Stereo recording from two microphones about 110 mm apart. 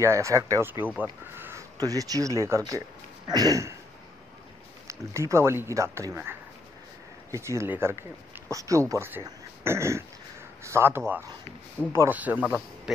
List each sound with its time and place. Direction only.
0.0 s speech: 25° right (ahead or behind)
1.8 s speech: 35° right (ahead or behind)
4.8 s speech: 25° right (ahead or behind)
9.6 s throat clearing: 25° right (ahead or behind)
10.6 s speech: 25° right (ahead or behind)